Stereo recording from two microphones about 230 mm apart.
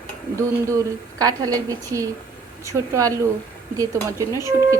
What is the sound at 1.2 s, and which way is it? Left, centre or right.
A woman's voice, centre.